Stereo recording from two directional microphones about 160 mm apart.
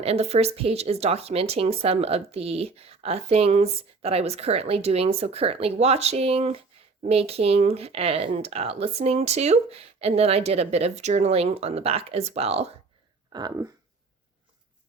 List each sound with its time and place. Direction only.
0.0 s speech: 40° right (ahead or behind)
13.3 s speech: 25° right (ahead or behind)